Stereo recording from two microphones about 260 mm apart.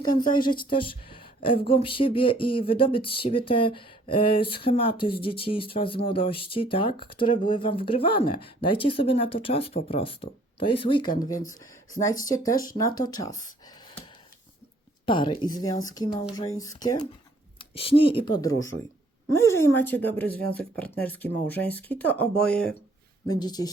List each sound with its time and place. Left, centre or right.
0.2 s speech: centre
12.2 s speech: centre
15.0 s speech: centre
23.2 s speech: centre